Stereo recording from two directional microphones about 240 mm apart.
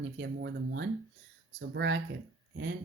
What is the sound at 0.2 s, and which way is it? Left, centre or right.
Speech, right.